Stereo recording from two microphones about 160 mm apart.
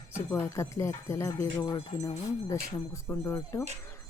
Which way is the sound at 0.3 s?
15° left (ahead or behind).